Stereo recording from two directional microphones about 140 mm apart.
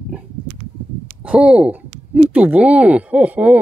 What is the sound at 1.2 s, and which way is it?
Speech, 5° right (ahead or behind).